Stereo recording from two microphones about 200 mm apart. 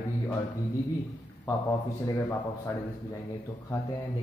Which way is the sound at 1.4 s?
15° left (ahead or behind).